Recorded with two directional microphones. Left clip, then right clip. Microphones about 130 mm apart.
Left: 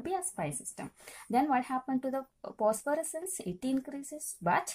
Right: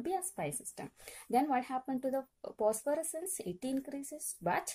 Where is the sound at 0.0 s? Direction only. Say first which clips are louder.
Left 2 dB; 45° right (ahead or behind).